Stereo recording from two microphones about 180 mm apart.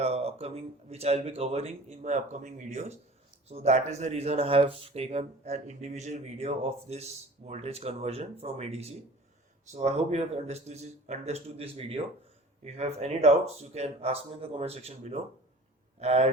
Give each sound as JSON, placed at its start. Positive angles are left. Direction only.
{"t": 0.0, "sound": "speech", "side_deg": -35}